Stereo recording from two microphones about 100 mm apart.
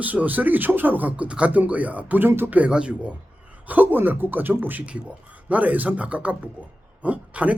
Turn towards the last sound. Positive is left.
turn(degrees=-15)  # may be behind; listen again after turning